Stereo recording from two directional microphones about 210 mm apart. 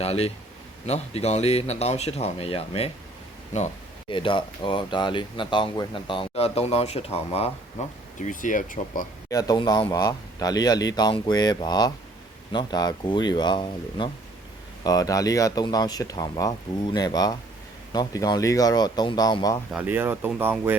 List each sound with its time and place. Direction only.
0.0 s speech: 30° left (ahead or behind)
4.1 s speech: 25° left (ahead or behind)
9.3 s speech: 15° left (ahead or behind)
19.7 s speech: 10° right (ahead or behind)